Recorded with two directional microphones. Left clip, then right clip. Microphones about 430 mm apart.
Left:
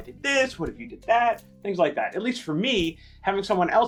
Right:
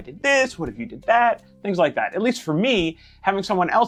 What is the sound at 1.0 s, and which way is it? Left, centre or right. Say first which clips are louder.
Speech: right 4 dB; right.